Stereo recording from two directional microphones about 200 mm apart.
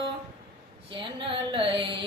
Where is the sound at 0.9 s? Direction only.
25° right (ahead or behind).